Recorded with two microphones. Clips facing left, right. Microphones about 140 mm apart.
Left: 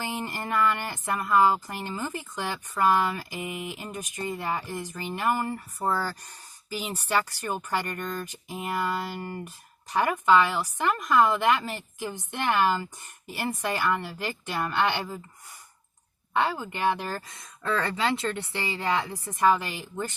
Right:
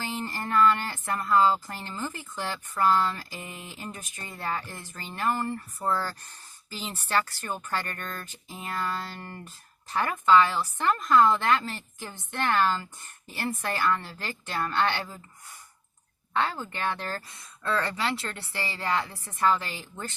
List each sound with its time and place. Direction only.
0.0 s speech: 15° left (ahead or behind)
16.3 s speech: 15° left (ahead or behind)